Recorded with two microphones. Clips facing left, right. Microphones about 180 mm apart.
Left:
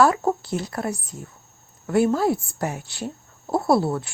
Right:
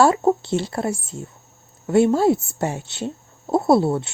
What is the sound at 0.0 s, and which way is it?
Speech, 25° right (ahead or behind).